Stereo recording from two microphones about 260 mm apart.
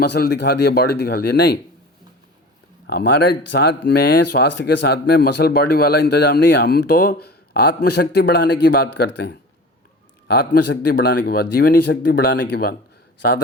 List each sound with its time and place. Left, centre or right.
0.0 s speech: left
2.8 s speech: left